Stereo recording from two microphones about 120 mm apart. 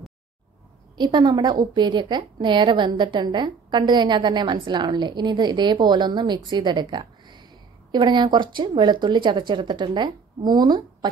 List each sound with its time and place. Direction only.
0.9 s a woman's voice: 40° right (ahead or behind)